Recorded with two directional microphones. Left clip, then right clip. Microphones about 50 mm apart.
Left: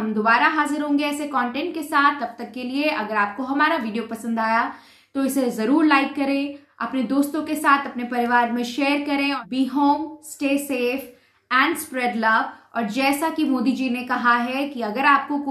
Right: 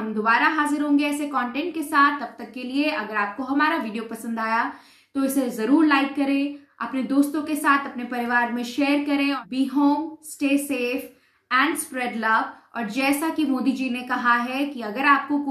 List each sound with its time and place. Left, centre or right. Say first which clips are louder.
0.1 s a woman's voice: left 2 dB; left